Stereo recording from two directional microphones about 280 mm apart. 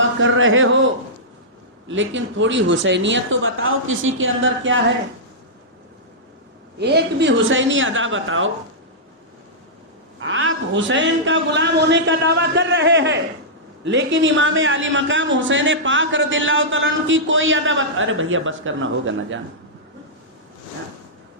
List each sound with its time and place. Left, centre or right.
0.0 s speech: right
1.9 s a man's voice: right
6.7 s a man's voice: right
10.2 s a man's voice: right